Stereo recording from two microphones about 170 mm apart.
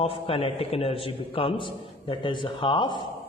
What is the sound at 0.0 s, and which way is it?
A man's voice, 35° left (ahead or behind).